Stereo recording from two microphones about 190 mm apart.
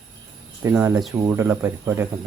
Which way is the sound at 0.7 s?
10° right (ahead or behind).